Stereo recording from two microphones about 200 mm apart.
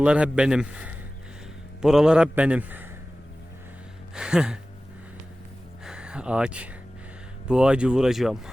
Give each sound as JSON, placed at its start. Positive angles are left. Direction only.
{"t": 0.0, "sound": "a man's voice", "side_deg": -5}
{"t": 4.1, "sound": "a man's voice", "side_deg": -5}
{"t": 5.8, "sound": "a sound", "side_deg": -5}
{"t": 7.4, "sound": "a man's voice", "side_deg": -5}